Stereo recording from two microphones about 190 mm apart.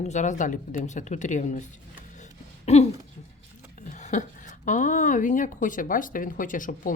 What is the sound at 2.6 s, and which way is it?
Speech, 35° left (ahead or behind).